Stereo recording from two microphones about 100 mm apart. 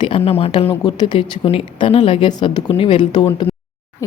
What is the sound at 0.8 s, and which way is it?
Speech, 45° left (ahead or behind).